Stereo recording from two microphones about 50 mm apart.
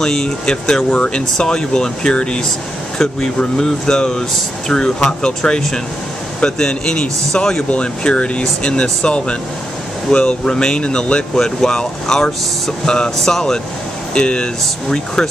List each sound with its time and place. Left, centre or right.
0.0 s speech: centre